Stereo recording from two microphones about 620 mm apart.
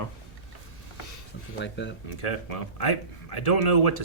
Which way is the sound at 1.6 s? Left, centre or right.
Centre.